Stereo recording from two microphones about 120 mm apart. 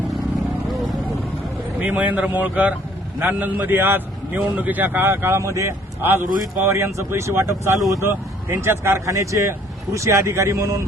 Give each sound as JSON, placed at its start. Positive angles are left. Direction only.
{"t": 1.8, "sound": "a man's voice", "side_deg": -15}